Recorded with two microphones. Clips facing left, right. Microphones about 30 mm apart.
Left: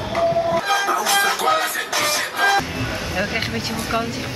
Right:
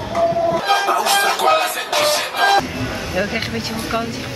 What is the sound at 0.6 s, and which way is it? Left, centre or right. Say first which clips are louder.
Music: right 3 dB; right.